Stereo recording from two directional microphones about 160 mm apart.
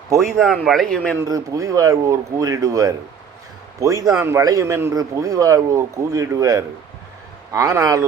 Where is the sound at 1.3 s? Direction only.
20° right (ahead or behind).